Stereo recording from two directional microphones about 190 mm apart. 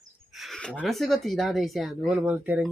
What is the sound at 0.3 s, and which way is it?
Speech, centre (ahead or behind).